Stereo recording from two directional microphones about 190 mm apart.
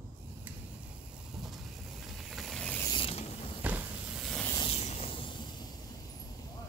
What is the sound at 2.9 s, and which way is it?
Mechanisms, 30° left (ahead or behind).